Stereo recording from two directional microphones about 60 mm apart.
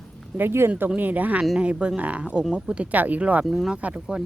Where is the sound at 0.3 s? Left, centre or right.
Right.